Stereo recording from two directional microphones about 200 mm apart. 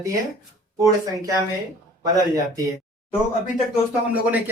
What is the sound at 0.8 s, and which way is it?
Speech, 20° right (ahead or behind).